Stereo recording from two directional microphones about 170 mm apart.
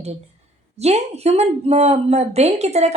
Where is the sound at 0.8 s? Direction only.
40° right (ahead or behind).